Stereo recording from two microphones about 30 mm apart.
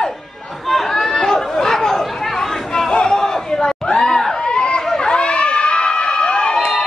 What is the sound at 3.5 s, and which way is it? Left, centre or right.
Crowd, left.